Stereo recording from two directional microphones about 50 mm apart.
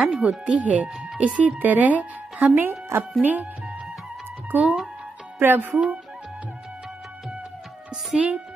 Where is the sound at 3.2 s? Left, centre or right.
Right.